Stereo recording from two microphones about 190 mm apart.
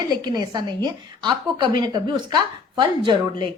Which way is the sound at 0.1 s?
20° right (ahead or behind).